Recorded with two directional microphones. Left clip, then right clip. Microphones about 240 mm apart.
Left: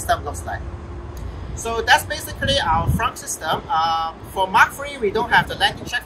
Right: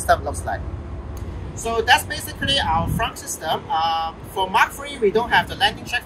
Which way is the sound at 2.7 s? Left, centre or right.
Centre.